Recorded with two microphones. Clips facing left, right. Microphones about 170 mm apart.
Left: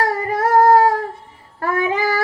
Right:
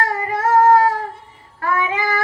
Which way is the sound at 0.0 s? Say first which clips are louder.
Left 2 dB; 40° left (ahead or behind).